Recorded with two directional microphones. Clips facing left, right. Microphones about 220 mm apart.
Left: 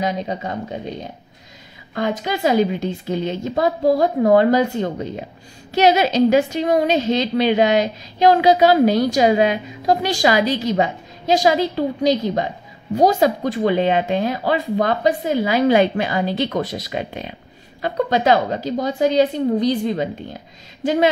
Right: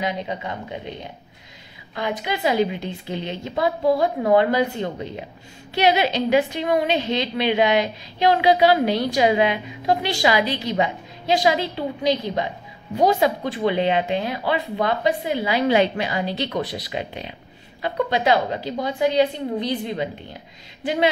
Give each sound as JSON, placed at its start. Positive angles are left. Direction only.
{"t": 0.0, "sound": "a woman's voice", "side_deg": 45}
{"t": 2.0, "sound": "a woman's voice", "side_deg": 45}